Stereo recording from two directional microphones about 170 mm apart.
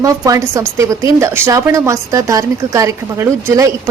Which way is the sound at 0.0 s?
20° right (ahead or behind).